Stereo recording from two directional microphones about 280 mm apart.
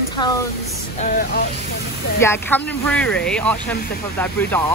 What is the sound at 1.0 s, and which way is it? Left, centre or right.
Speech, left.